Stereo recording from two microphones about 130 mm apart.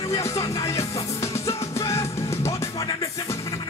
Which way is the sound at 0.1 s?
25° left (ahead or behind).